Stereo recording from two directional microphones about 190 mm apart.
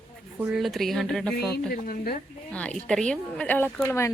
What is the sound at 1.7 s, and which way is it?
Speech, 50° left (ahead or behind).